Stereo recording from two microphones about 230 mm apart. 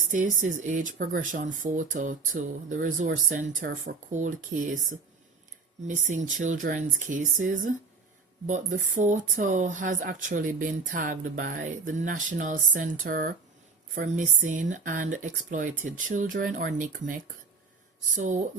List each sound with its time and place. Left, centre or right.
0.7 s speech: right